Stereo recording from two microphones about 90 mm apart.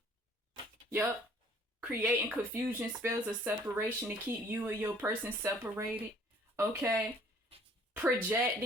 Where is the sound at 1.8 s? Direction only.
15° right (ahead or behind).